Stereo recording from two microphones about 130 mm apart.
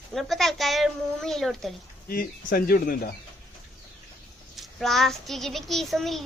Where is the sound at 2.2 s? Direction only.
90° left.